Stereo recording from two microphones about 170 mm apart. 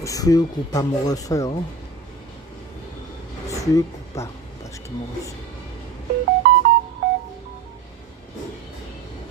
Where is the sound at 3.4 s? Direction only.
20° left (ahead or behind).